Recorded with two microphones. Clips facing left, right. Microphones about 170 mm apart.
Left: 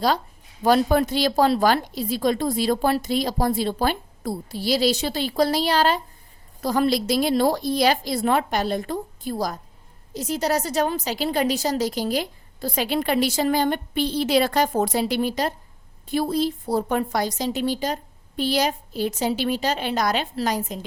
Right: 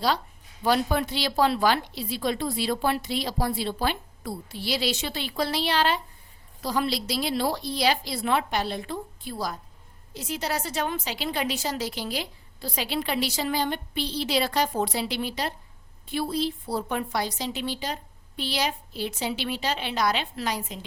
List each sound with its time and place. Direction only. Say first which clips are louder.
0.6 s a woman's voice: left 6 dB; 45° left (ahead or behind)